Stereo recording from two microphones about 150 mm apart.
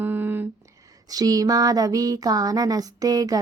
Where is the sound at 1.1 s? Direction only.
25° right (ahead or behind).